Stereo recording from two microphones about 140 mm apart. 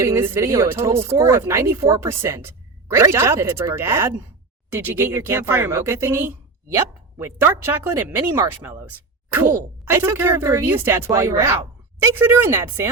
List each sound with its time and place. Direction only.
0.0 s speech: 20° right (ahead or behind)